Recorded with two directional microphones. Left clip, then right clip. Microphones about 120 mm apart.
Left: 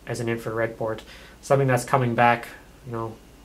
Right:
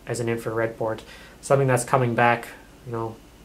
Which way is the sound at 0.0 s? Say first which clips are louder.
Right 2 dB; 25° right (ahead or behind).